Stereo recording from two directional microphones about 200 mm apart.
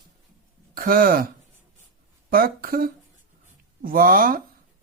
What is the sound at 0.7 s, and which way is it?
Speech, 45° right (ahead or behind).